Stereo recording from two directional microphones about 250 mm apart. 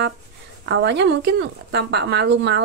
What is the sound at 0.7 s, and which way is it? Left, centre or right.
Speech, right.